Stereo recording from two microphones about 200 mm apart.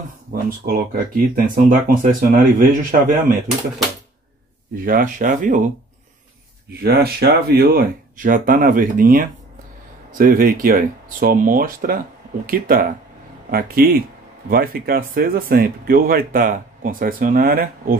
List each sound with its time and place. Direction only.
0.3 s speech: 50° right (ahead or behind)
4.7 s speech: 45° right (ahead or behind)
6.7 s speech: 50° right (ahead or behind)